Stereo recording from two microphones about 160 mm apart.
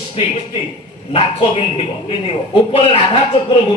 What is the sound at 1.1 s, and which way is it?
Speech, 35° left (ahead or behind).